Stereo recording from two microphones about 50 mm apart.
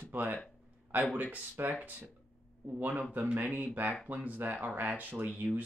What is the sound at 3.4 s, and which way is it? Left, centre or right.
Speech, right.